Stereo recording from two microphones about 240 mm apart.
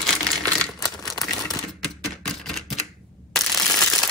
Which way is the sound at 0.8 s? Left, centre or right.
Centre.